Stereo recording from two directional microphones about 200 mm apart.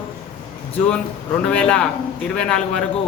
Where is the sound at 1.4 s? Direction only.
5° left (ahead or behind).